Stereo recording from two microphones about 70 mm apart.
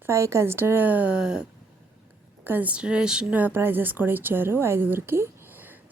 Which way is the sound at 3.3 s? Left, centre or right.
Right.